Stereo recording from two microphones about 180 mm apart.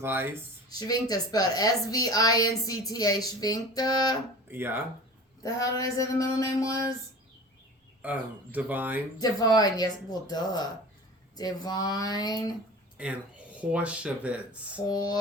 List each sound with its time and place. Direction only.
0.0 s speech: 10° right (ahead or behind)
0.7 s a woman's voice: 20° left (ahead or behind)
4.4 s speech: 10° right (ahead or behind)
5.4 s a woman's voice: 20° left (ahead or behind)
8.0 s speech: 10° right (ahead or behind)
9.2 s a woman's voice: 20° left (ahead or behind)
13.0 s speech: 5° right (ahead or behind)
14.8 s a woman's voice: 20° left (ahead or behind)